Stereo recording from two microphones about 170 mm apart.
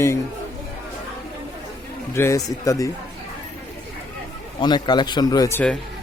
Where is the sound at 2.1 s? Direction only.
15° left (ahead or behind).